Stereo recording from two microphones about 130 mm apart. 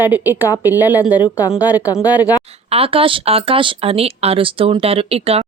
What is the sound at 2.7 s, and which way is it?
Speech, 45° right (ahead or behind).